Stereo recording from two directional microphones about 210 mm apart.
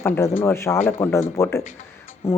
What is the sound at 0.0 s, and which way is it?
Speech, 10° left (ahead or behind).